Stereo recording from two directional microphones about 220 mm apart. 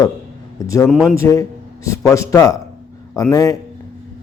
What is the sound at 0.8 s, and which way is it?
A man's voice, 5° left (ahead or behind).